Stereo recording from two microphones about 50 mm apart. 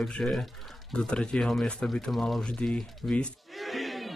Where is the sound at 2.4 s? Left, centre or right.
Left.